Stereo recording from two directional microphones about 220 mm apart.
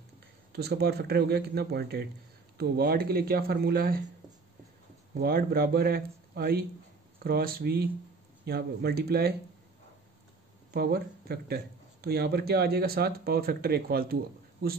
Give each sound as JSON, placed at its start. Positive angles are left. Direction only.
{"t": 0.5, "sound": "speech", "side_deg": -45}
{"t": 5.2, "sound": "speech", "side_deg": -45}
{"t": 10.7, "sound": "speech", "side_deg": -45}